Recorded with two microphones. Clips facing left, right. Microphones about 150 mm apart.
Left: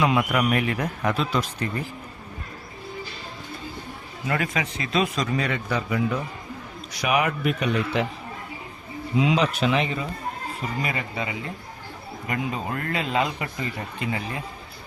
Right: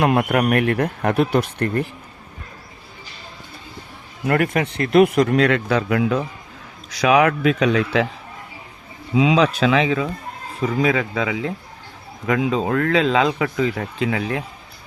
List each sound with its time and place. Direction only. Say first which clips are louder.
0.0 s speech: right 4 dB; 60° right (ahead or behind)
4.3 s speech: right 7 dB; 60° right (ahead or behind); by 8.0 s 90° right
9.6 s speech: right 6 dB; 90° right